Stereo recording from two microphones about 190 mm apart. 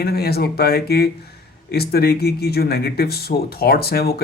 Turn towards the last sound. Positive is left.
turn(degrees=55)  # may be behind; listen again after turning